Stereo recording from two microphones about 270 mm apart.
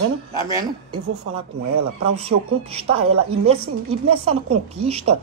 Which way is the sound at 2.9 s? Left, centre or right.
Right.